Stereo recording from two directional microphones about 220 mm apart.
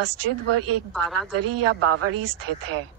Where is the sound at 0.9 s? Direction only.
Centre (ahead or behind).